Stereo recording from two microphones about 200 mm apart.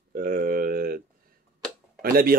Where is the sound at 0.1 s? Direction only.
45° right (ahead or behind).